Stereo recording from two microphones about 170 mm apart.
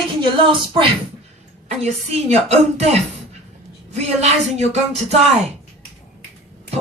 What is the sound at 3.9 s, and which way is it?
Speech, 40° right (ahead or behind).